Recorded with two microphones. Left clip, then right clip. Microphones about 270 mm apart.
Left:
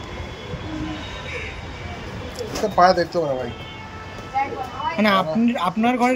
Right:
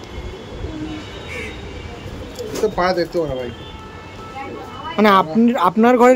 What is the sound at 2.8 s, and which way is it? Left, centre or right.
Speech, centre.